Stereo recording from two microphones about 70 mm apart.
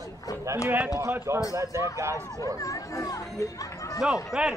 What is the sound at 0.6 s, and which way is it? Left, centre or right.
Speech, right.